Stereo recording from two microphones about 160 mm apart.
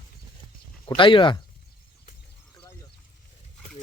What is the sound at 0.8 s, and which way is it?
Speech, 35° left (ahead or behind).